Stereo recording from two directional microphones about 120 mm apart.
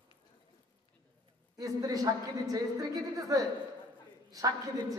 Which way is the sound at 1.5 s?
30° right (ahead or behind).